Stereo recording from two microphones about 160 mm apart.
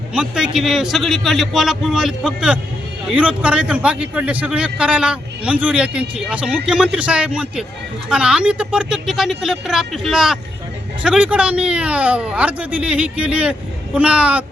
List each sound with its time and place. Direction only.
0.1 s a man's voice: 5° right (ahead or behind)